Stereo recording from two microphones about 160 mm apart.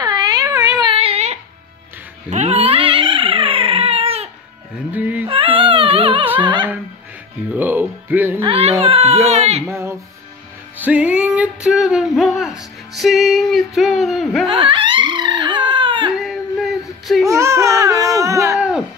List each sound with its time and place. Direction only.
0.0 s a sound: 25° right (ahead or behind); by 1.4 s 40° right (ahead or behind)
2.2 s cat: 45° right (ahead or behind)
4.9 s a sound: 10° right (ahead or behind)
5.3 s music: 35° right (ahead or behind)
6.4 s dog: 30° right (ahead or behind)
7.5 s speech: 10° right (ahead or behind)
8.4 s speech: 35° right (ahead or behind)
9.7 s speech: 15° right (ahead or behind)
10.8 s music: 10° right (ahead or behind)
14.5 s crying: 30° right (ahead or behind)
16.2 s female singing: centre (ahead or behind)
17.3 s baby cry: 20° right (ahead or behind)
18.6 s music: 5° right (ahead or behind)